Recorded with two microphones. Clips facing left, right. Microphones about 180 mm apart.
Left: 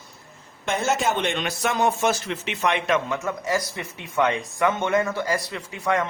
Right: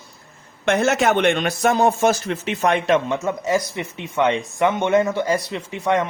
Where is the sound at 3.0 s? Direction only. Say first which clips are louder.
Right 4 dB; 25° right (ahead or behind).